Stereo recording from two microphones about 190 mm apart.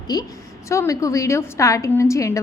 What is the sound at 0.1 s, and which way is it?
A woman's voice, 20° left (ahead or behind).